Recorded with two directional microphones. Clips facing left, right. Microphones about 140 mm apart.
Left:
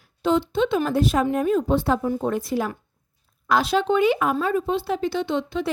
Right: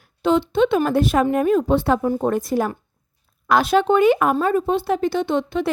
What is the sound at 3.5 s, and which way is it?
A woman's voice, 55° right (ahead or behind).